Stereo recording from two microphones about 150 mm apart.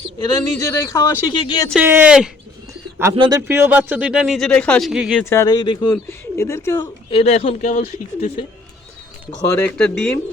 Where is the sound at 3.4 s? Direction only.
15° right (ahead or behind).